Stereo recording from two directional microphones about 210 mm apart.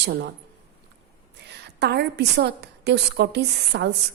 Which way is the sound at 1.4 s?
55° right (ahead or behind).